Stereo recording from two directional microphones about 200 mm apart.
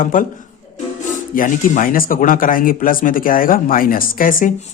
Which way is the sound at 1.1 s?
40° left (ahead or behind).